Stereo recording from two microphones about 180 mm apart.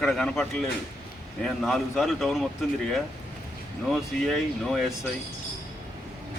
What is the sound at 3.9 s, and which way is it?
A man's voice, centre (ahead or behind).